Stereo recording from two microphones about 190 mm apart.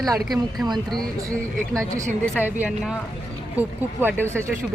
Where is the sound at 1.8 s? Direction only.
15° right (ahead or behind).